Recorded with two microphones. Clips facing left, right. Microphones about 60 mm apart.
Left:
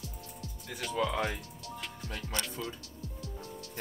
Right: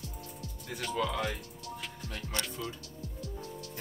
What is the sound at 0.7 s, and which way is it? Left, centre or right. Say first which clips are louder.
Speech: right 1 dB; centre.